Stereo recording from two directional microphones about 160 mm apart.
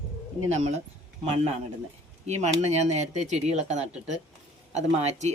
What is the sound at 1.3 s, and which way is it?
Speech, 40° right (ahead or behind).